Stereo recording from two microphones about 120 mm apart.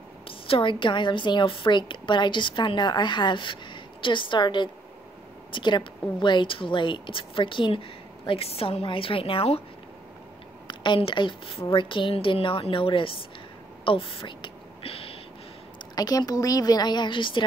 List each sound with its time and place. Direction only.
0.3 s a woman's voice: 45° left (ahead or behind)
10.7 s a woman's voice: 40° left (ahead or behind)
13.8 s whispering: 50° left (ahead or behind)
15.9 s a woman's voice: 35° left (ahead or behind)